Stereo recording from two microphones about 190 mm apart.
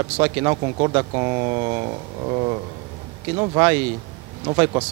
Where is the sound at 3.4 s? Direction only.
20° right (ahead or behind).